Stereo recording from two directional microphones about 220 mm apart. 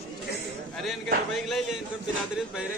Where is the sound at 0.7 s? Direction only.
Centre (ahead or behind).